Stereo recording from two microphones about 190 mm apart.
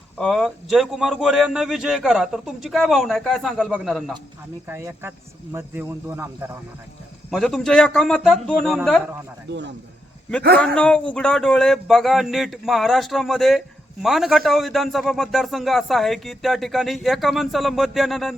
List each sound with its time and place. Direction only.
0.2 s a man's voice: centre (ahead or behind)
4.7 s speech: 15° right (ahead or behind)
7.3 s a man's voice: centre (ahead or behind)
9.5 s speech: 65° right (ahead or behind)
10.8 s a man's voice: 5° left (ahead or behind)